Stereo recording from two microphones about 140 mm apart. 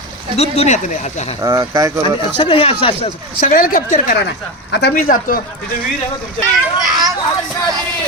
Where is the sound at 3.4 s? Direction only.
75° left (ahead or behind).